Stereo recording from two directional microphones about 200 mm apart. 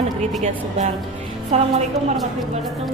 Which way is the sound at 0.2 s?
35° right (ahead or behind).